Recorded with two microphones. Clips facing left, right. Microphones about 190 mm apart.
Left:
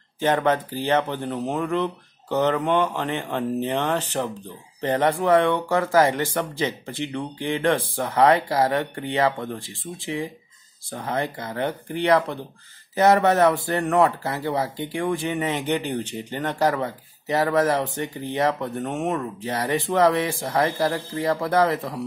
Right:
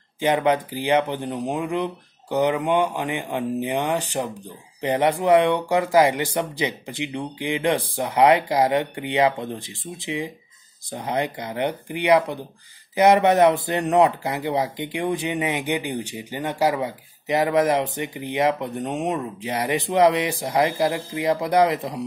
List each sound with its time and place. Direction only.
0.2 s speech: 15° right (ahead or behind)